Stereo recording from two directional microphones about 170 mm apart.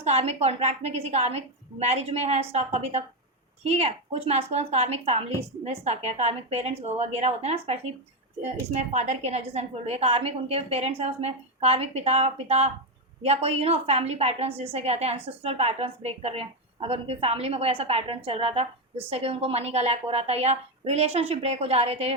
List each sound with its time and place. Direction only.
0.0 s a woman's voice: 40° right (ahead or behind)
8.8 s a woman's voice: 40° right (ahead or behind)